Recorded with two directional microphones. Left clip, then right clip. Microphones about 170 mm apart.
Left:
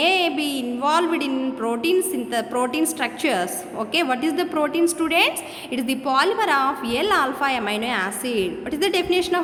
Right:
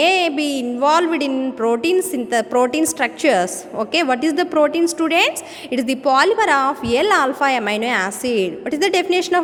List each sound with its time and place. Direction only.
0.0 s speech: 35° right (ahead or behind)